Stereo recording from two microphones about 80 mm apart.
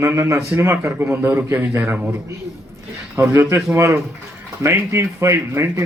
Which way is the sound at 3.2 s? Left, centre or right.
Right.